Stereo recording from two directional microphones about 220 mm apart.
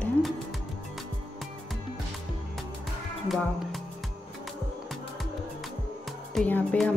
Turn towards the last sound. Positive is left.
turn(degrees=5)  # may be behind; listen again after turning